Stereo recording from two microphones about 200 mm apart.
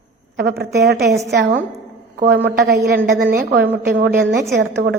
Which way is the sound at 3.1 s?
50° right (ahead or behind).